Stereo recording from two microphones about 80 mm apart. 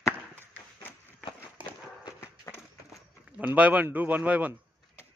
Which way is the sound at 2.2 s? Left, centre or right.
Left.